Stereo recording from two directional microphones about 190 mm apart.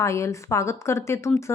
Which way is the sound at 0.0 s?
15° left (ahead or behind).